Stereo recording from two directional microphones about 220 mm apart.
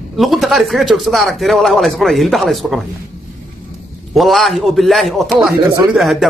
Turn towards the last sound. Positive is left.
turn(degrees=0)  # may be behind; listen again after turning